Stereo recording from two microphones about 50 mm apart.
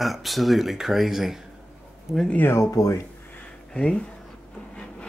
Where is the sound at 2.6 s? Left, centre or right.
Left.